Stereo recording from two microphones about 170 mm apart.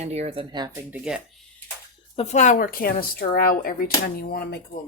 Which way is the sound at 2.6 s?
65° left (ahead or behind).